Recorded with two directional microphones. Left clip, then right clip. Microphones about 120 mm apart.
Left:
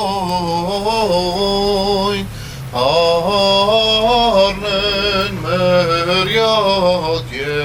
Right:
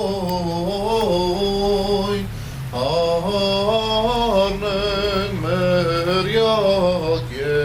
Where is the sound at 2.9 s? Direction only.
20° left (ahead or behind).